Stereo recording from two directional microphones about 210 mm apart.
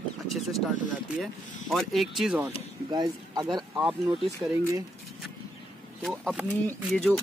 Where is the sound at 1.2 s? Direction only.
Centre (ahead or behind).